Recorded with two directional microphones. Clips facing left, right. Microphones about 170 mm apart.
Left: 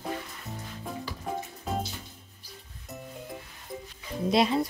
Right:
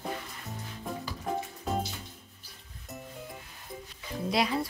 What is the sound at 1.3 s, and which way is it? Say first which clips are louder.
Music: right 2 dB; centre (ahead or behind).